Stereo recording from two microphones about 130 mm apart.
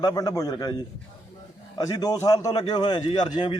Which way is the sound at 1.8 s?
25° left (ahead or behind).